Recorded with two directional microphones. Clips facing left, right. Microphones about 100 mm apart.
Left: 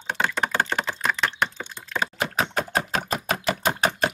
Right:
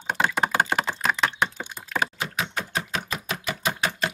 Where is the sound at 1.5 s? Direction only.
10° right (ahead or behind).